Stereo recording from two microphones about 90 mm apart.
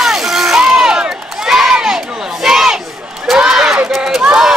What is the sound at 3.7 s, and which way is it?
Run, 20° right (ahead or behind).